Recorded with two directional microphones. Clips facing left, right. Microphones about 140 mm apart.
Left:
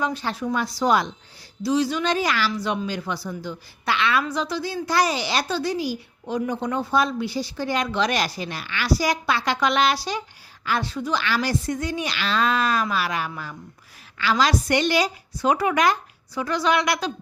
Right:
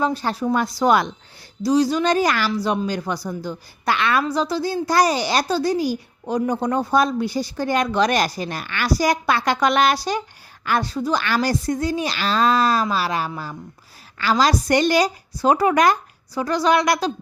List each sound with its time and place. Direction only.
0.0 s a woman's voice: 40° right (ahead or behind); by 1.1 s 60° right (ahead or behind)
1.6 s a woman's voice: 40° right (ahead or behind)